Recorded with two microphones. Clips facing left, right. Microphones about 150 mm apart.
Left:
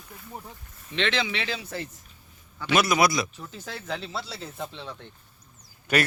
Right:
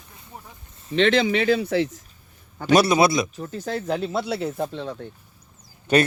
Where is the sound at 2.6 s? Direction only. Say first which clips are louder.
Right 5 dB; 35° right (ahead or behind).